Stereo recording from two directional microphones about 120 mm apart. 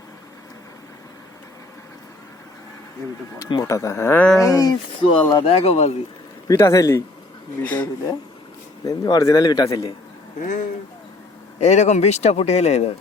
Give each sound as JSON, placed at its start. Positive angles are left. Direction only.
{"t": 3.3, "sound": "speech", "side_deg": 30}
{"t": 5.3, "sound": "speech", "side_deg": 50}
{"t": 6.5, "sound": "speech", "side_deg": 25}
{"t": 7.6, "sound": "speech", "side_deg": 15}
{"t": 8.8, "sound": "a man's voice", "side_deg": 30}
{"t": 10.4, "sound": "speech", "side_deg": 90}
{"t": 11.6, "sound": "speech", "side_deg": 70}